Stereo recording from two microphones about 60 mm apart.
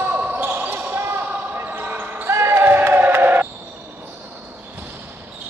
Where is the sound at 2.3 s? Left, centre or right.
Right.